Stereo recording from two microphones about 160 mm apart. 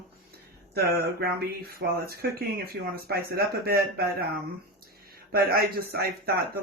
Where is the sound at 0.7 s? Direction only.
80° right.